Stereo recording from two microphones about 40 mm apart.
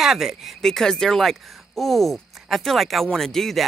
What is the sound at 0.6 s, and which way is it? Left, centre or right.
Speech, centre.